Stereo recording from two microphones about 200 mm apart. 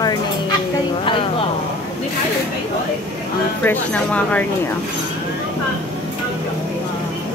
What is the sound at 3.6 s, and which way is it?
Speech, 10° left (ahead or behind).